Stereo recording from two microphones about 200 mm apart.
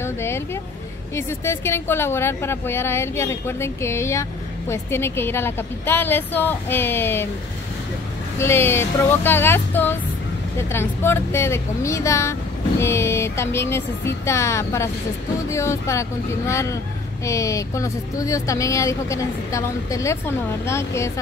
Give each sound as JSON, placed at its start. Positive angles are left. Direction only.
{"t": 0.0, "sound": "a sound", "side_deg": 10}
{"t": 1.1, "sound": "a woman's voice", "side_deg": 15}
{"t": 8.4, "sound": "a woman's voice", "side_deg": 10}